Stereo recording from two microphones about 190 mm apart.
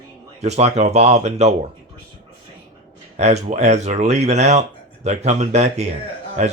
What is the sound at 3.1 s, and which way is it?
Speech, 35° right (ahead or behind).